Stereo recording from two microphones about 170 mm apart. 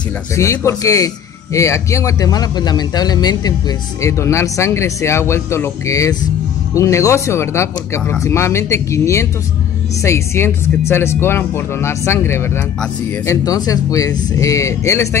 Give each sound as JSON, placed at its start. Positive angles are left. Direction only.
{"t": 0.4, "sound": "speech", "side_deg": 15}